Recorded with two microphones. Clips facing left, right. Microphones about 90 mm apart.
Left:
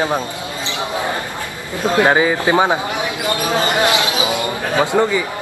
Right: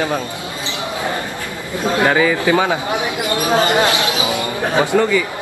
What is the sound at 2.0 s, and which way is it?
Speech, 25° left (ahead or behind).